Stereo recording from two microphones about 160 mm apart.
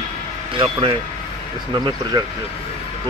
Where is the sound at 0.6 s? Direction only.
35° right (ahead or behind).